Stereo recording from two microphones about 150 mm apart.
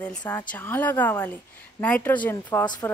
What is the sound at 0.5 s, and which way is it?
A woman's voice, 10° left (ahead or behind).